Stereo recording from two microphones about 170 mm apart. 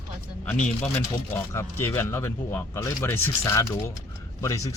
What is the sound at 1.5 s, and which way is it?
Speech, 15° left (ahead or behind).